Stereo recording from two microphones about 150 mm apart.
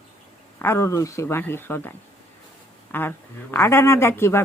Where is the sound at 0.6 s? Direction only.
20° left (ahead or behind).